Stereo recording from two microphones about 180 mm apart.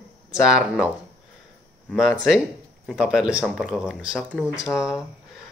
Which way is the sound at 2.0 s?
Centre (ahead or behind).